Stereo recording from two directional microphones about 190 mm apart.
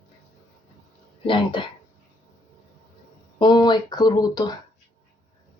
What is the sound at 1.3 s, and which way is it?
Speech, 25° left (ahead or behind).